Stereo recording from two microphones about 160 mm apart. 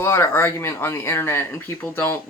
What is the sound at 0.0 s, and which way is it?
Speech, 15° left (ahead or behind).